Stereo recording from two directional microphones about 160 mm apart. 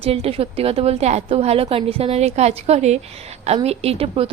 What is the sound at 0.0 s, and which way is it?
A woman's voice, 40° right (ahead or behind).